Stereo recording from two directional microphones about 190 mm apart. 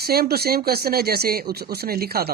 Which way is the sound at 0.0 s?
55° right (ahead or behind).